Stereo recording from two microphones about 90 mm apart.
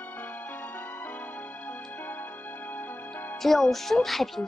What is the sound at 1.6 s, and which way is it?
Music, 20° left (ahead or behind).